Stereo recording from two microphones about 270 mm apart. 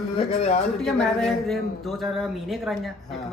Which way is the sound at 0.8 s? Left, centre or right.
Centre.